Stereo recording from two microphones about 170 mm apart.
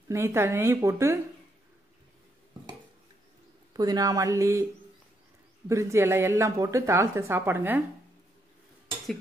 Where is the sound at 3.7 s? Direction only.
20° right (ahead or behind).